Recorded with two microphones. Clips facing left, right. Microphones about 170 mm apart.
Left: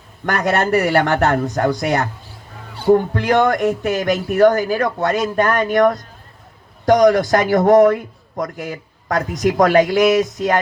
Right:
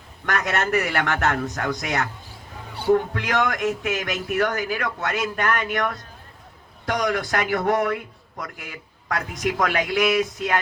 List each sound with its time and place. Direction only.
0.3 s a man's voice: 35° left (ahead or behind)